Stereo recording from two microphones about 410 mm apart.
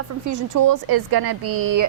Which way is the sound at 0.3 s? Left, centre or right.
Right.